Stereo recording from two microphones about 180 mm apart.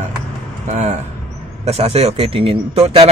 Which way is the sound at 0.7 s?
40° right (ahead or behind).